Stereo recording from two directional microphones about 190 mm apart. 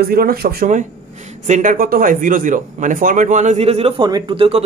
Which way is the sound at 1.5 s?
45° right (ahead or behind).